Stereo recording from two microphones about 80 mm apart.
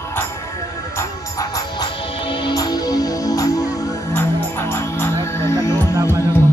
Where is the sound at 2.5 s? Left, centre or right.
Left.